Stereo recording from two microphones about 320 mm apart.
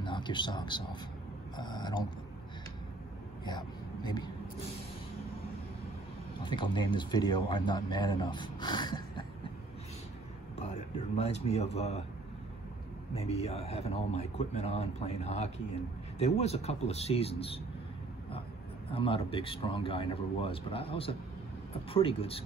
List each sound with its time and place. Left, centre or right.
0.0 s a man's voice: centre
3.4 s speech: centre
6.4 s a man's voice: centre
10.6 s speech: left
13.1 s speech: centre
18.9 s a man's voice: centre